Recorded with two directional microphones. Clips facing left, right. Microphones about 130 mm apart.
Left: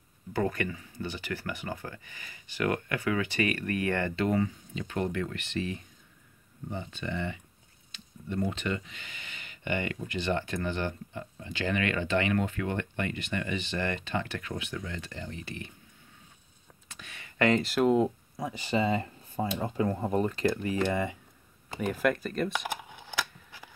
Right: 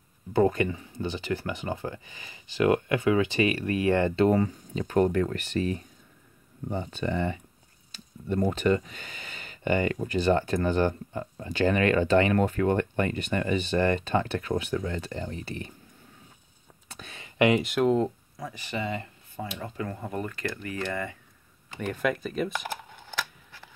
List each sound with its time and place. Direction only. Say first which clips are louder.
0.3 s speech: right 7 dB; 25° right (ahead or behind)
16.9 s a sound: right 4 dB; 30° right (ahead or behind)
17.4 s speech: right 3 dB; 10° right (ahead or behind)
17.6 s speech: right 1 dB; centre (ahead or behind)
18.4 s speech: left 4 dB; 25° left (ahead or behind)
21.7 s a sound: left 1 dB; centre (ahead or behind)